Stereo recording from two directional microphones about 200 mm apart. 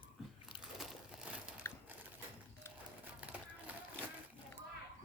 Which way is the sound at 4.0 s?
5° left (ahead or behind).